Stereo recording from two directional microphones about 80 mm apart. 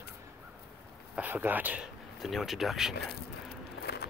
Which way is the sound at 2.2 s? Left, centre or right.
Centre.